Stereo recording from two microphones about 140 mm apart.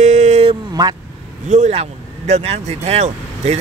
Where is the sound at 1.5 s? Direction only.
55° right (ahead or behind).